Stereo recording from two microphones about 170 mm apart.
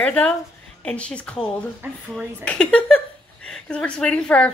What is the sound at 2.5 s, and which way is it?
A woman's voice, 5° left (ahead or behind).